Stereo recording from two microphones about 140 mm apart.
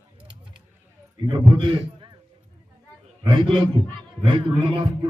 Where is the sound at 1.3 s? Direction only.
35° right (ahead or behind).